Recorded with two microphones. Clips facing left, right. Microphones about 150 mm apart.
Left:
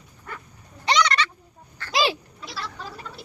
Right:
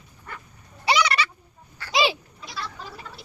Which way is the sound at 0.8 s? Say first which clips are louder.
Even; 10° right (ahead or behind).